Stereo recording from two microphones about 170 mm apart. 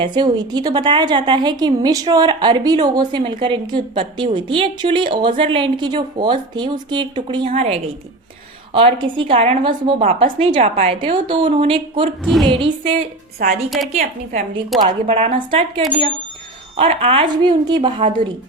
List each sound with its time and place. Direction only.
0.0 s a woman's voice: 25° right (ahead or behind)
7.4 s a woman's voice: 35° right (ahead or behind)
12.2 s a woman's voice: centre (ahead or behind)
12.5 s a woman's voice: 30° right (ahead or behind)
13.7 s a woman's voice: centre (ahead or behind)
14.8 s a woman's voice: 35° right (ahead or behind)
17.8 s a woman's voice: 40° right (ahead or behind)